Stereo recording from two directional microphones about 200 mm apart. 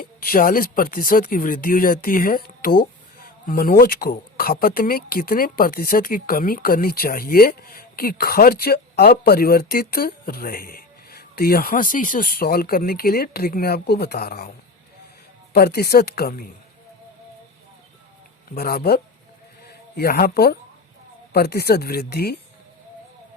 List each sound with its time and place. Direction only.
0.0 s speech: 45° left (ahead or behind)
15.5 s speech: 50° left (ahead or behind)
18.5 s speech: 50° left (ahead or behind)